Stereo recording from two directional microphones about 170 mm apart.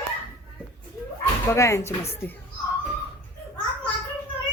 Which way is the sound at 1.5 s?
15° left (ahead or behind).